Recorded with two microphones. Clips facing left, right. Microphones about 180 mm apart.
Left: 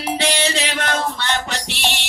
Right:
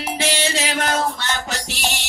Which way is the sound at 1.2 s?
40° right (ahead or behind).